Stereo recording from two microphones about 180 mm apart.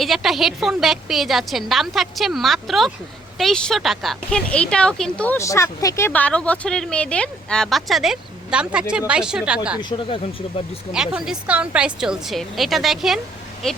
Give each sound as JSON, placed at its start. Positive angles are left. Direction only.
{"t": 0.0, "sound": "speech", "side_deg": 0}
{"t": 9.9, "sound": "speech", "side_deg": 30}
{"t": 10.9, "sound": "speech", "side_deg": -5}